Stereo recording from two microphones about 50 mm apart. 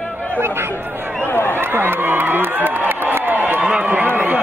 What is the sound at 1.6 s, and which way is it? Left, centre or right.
Crowd, right.